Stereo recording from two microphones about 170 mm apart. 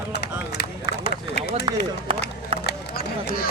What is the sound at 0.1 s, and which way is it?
Run, 70° left (ahead or behind).